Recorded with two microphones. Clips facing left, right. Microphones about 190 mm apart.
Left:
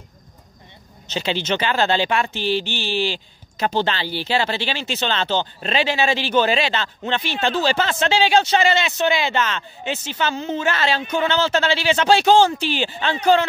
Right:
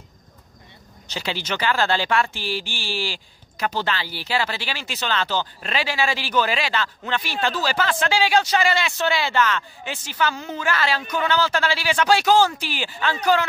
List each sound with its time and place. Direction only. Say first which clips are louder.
1.0 s speech: left 5 dB; 20° left (ahead or behind)